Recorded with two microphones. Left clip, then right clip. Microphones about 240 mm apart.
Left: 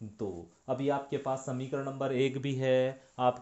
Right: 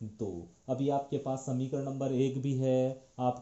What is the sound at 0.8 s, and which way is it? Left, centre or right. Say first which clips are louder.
Speech: right 1 dB; left.